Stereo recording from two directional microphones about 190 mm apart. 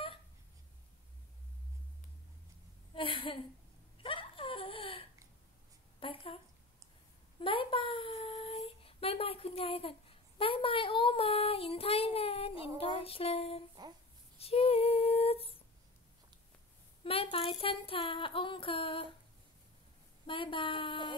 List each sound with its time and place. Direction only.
2.9 s a woman's voice: 30° left (ahead or behind)
4.0 s a sound: 30° left (ahead or behind)
7.3 s speech: 25° left (ahead or behind)
13.8 s a child's voice: 20° right (ahead or behind)
14.4 s female singing: 30° left (ahead or behind)
17.0 s child singing: 30° left (ahead or behind)
20.2 s child singing: 25° left (ahead or behind)